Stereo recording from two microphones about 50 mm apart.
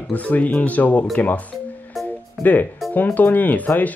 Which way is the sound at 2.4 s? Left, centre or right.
Left.